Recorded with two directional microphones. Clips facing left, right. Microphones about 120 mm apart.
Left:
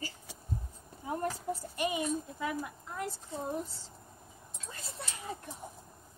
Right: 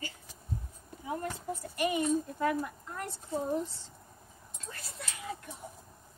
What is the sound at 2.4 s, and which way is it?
Speech, 10° left (ahead or behind).